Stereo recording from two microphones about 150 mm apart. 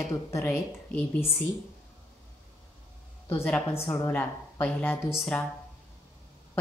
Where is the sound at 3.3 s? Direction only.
15° left (ahead or behind).